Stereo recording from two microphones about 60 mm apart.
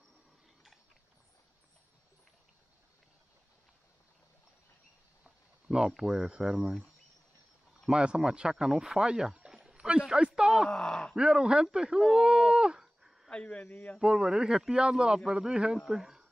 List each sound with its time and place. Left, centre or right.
5.2 s a sound: centre
5.9 s speech: centre
7.9 s speech: centre
10.7 s speech: centre
11.1 s speech: centre
13.3 s speech: centre
14.0 s speech: centre